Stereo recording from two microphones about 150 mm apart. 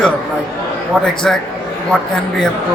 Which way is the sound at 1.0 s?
5° left (ahead or behind).